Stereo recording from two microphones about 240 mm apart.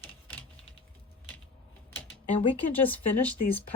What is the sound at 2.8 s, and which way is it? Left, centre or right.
Speech, centre.